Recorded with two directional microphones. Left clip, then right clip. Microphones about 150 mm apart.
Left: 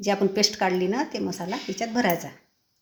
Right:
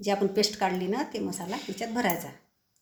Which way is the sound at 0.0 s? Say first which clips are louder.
Left 3 dB; 65° left (ahead or behind).